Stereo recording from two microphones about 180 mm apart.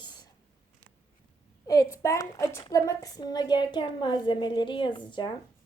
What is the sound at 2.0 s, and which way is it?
Speech, 15° left (ahead or behind).